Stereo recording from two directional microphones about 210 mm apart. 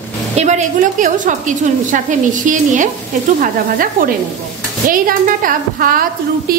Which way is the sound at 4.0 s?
40° right (ahead or behind).